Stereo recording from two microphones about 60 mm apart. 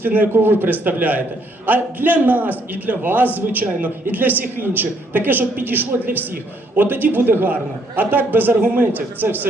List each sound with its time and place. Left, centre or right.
0.0 s a man's voice: right